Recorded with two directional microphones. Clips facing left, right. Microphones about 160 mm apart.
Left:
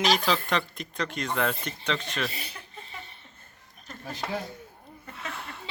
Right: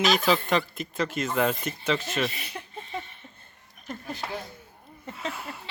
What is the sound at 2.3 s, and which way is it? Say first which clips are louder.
Speech: right 2 dB; 30° left (ahead or behind).